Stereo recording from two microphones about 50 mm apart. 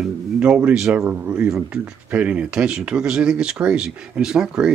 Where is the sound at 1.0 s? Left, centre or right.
Right.